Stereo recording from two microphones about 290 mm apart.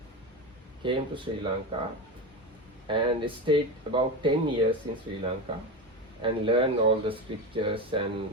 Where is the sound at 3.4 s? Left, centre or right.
Centre.